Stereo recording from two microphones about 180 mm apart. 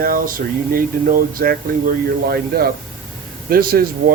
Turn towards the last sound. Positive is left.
turn(degrees=-55)  # may be behind; listen again after turning